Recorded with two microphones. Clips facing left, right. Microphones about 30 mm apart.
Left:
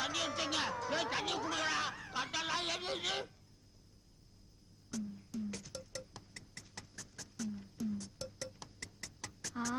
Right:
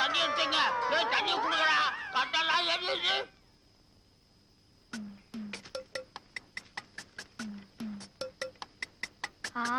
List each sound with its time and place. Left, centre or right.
0.0 s speech: right
4.9 s music: right